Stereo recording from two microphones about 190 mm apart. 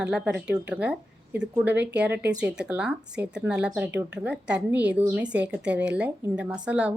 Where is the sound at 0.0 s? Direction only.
5° right (ahead or behind).